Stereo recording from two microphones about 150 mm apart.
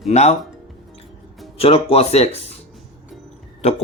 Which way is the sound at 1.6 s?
40° left (ahead or behind).